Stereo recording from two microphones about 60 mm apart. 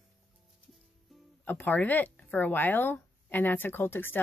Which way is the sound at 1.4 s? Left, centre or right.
Left.